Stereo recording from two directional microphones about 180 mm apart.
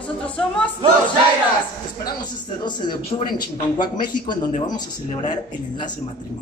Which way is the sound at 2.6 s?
25° left (ahead or behind).